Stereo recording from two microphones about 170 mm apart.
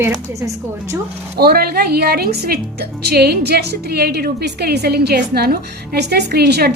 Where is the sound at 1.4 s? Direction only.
65° right (ahead or behind).